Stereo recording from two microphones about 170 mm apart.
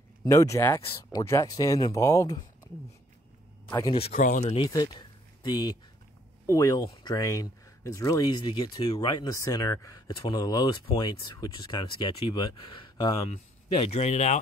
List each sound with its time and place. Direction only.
0.2 s speech: 20° left (ahead or behind)
0.8 s speech: 30° left (ahead or behind)
1.2 s speech: 20° left (ahead or behind)
3.7 s speech: 25° left (ahead or behind)
4.1 s speech: 50° left (ahead or behind)
4.6 s speech: 20° left (ahead or behind)
13.3 s speech: 35° left (ahead or behind)